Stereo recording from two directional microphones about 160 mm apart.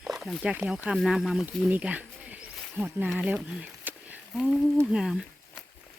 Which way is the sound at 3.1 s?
5° right (ahead or behind).